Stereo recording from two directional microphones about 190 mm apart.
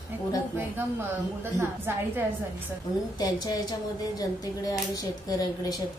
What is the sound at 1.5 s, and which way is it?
Speech, 10° right (ahead or behind).